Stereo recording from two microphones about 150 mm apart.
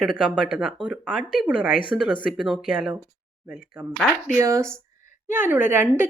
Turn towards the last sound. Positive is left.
turn(degrees=-15)  # may be behind; listen again after turning